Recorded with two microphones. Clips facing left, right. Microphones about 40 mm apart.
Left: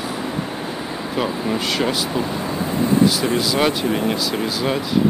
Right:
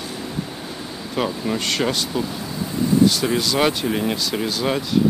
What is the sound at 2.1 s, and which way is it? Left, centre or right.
Vehicle, left.